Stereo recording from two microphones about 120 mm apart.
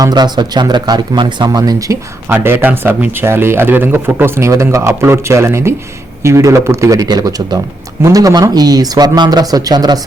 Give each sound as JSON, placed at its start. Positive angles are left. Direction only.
{"t": 0.0, "sound": "speech", "side_deg": -35}
{"t": 2.3, "sound": "speech", "side_deg": -20}